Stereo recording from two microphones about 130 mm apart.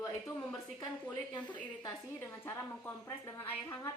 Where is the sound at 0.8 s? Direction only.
35° left (ahead or behind).